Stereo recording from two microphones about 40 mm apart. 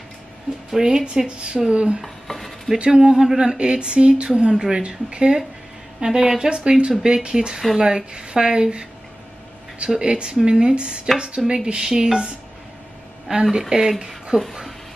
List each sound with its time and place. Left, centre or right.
0.8 s speech: centre
2.2 s dishes: centre
2.9 s speech: centre
9.9 s speech: right
13.3 s speech: centre